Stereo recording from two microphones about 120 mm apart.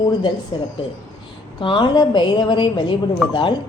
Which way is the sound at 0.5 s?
45° left (ahead or behind).